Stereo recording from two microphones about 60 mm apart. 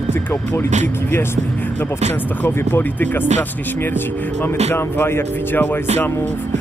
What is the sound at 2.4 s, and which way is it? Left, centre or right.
Speech, left.